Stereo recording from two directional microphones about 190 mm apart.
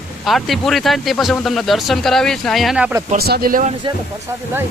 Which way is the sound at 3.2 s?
55° right (ahead or behind).